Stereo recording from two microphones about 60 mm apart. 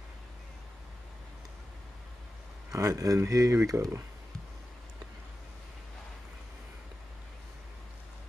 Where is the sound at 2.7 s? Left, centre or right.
Right.